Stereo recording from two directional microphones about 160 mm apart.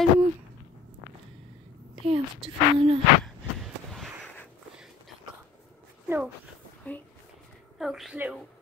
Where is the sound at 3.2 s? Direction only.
Centre (ahead or behind).